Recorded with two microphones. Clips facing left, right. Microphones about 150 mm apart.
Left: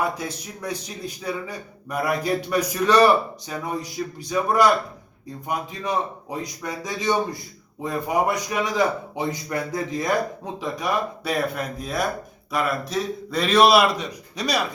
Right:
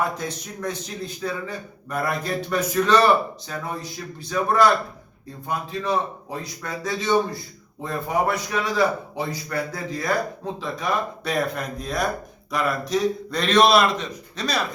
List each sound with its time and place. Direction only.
0.0 s a man's voice: 10° left (ahead or behind)